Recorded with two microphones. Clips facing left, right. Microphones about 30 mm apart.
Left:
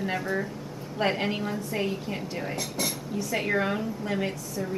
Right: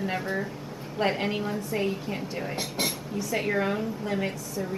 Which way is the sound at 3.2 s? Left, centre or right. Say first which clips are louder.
Even; centre.